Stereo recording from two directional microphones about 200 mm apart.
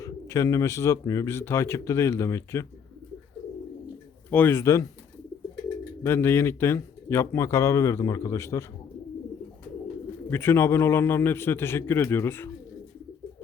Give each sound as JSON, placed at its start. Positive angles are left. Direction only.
{"t": 0.0, "sound": "speech", "side_deg": 15}
{"t": 4.3, "sound": "speech", "side_deg": 10}
{"t": 6.0, "sound": "speech", "side_deg": 10}
{"t": 10.2, "sound": "speech", "side_deg": 10}